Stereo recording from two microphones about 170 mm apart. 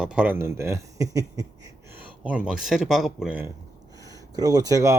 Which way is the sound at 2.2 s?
5° right (ahead or behind).